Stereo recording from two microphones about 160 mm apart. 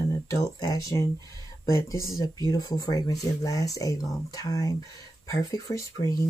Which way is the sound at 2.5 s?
25° left (ahead or behind).